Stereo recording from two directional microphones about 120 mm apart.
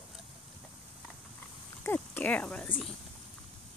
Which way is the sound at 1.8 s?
15° left (ahead or behind).